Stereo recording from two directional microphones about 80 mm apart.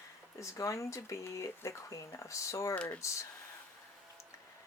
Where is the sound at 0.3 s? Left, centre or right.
Left.